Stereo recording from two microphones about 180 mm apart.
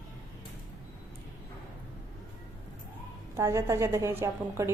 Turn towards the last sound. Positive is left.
turn(degrees=-15)  # may be behind; listen again after turning